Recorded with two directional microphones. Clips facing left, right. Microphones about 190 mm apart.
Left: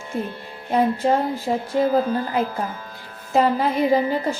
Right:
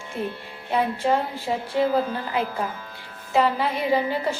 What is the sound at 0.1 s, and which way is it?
A woman's voice, 45° left (ahead or behind).